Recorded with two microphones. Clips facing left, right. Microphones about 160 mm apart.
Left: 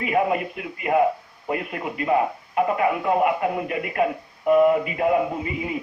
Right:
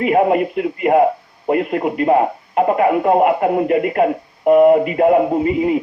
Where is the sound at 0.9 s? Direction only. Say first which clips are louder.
Right 6 dB; 50° right (ahead or behind).